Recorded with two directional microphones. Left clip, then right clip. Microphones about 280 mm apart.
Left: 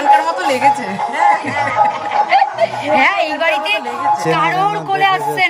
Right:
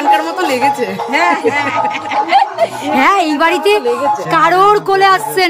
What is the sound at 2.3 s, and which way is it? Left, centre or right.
A woman's voice, centre.